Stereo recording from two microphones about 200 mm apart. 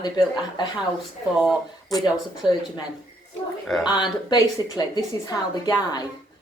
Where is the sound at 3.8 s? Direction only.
20° left (ahead or behind).